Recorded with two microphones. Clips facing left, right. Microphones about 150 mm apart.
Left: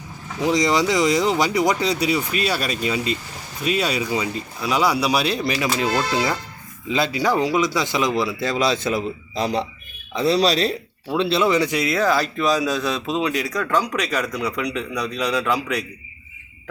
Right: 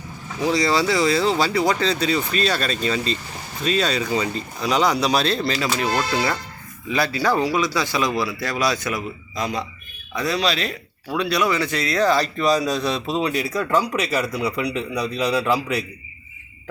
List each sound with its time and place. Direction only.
0.4 s a man's voice: 20° left (ahead or behind); by 15.8 s 5° right (ahead or behind)